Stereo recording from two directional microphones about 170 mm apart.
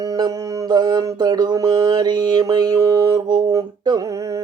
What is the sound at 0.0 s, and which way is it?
Mantra, 20° right (ahead or behind).